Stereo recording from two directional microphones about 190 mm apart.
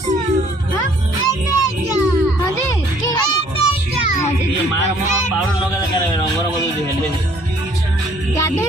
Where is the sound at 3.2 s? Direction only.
20° left (ahead or behind).